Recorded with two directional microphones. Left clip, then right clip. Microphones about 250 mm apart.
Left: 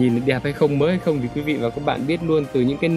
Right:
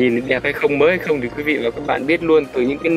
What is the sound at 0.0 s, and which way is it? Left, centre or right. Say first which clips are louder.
Speech: right 4 dB; centre.